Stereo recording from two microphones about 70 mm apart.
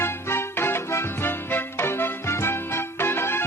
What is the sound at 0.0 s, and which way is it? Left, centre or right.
Music, left.